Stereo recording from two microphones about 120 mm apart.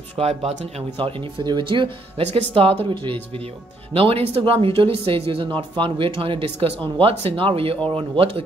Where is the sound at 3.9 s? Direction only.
50° right (ahead or behind).